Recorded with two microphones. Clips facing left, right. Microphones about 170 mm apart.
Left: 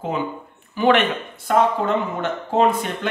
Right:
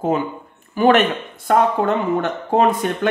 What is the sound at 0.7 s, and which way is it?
A woman's voice, 45° right (ahead or behind).